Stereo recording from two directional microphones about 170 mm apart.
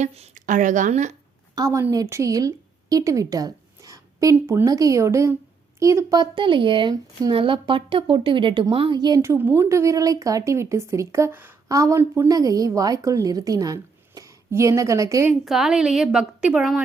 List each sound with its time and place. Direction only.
0.0 s a woman's voice: 40° right (ahead or behind)
1.5 s a woman's voice: 20° right (ahead or behind)
15.4 s a woman's voice: 5° right (ahead or behind)